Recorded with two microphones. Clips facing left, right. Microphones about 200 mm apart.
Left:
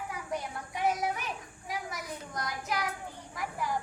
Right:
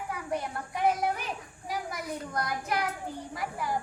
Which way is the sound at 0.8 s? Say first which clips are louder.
Right 3 dB; 50° right (ahead or behind).